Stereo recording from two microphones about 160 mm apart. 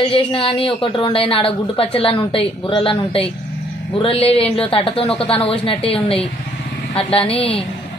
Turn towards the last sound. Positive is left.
turn(degrees=35)  # may be behind; listen again after turning